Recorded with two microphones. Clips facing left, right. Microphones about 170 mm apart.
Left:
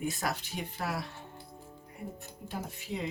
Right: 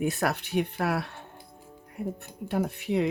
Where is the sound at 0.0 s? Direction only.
65° right (ahead or behind).